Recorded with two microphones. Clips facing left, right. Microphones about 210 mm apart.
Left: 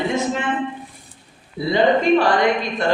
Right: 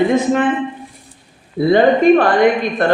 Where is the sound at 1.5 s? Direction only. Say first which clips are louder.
Right 5 dB; 55° right (ahead or behind).